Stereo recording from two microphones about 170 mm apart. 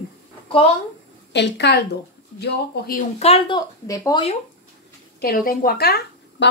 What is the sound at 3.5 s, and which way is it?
Speech, 20° left (ahead or behind).